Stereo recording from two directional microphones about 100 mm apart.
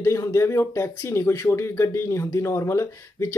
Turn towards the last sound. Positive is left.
turn(degrees=30)  # may be behind; listen again after turning